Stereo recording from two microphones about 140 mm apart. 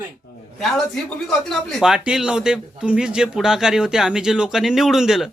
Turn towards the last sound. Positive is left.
turn(degrees=0)  # may be behind; listen again after turning